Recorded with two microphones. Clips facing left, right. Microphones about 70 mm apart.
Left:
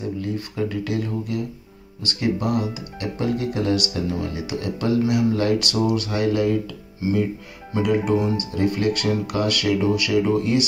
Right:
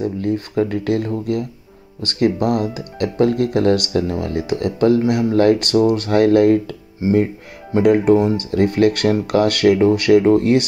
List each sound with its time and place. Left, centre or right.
0.0 s speech: right
7.0 s speech: right
8.4 s speech: right